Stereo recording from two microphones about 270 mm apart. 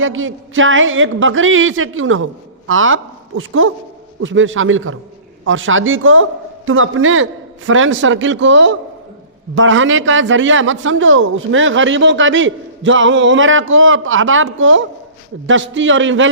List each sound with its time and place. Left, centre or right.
0.0 s a man's voice: right